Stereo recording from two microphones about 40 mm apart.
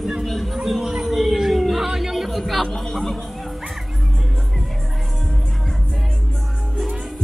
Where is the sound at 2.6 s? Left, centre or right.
Centre.